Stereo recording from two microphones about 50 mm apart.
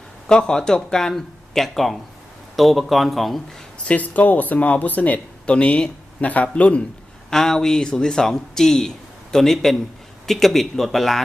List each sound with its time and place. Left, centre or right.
0.3 s speech: centre
3.8 s speech: left
7.3 s speech: centre